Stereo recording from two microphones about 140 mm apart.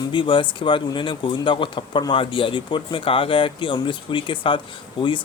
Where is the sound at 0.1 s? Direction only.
35° left (ahead or behind).